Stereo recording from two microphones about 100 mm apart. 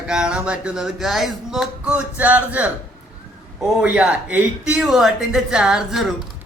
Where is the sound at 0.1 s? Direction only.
10° right (ahead or behind).